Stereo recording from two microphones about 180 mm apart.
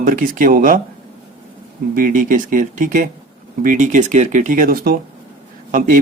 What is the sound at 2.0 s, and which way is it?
Speech, 45° right (ahead or behind).